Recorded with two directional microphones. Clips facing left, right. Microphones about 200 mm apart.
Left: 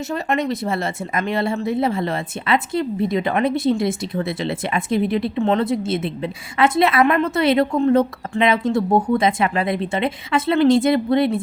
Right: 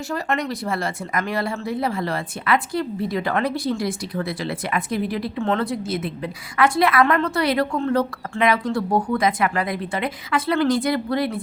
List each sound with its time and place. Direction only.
0.1 s speech: 20° left (ahead or behind)